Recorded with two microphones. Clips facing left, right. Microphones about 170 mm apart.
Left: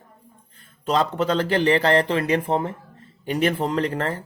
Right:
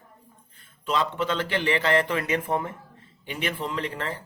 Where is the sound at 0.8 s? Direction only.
40° left (ahead or behind).